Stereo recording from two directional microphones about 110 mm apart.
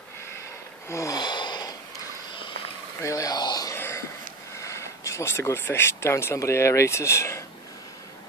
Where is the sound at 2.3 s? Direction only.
50° left (ahead or behind).